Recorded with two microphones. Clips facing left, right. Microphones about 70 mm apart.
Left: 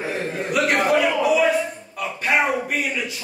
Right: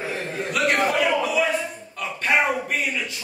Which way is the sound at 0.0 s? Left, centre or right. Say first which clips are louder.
Left 2 dB; centre.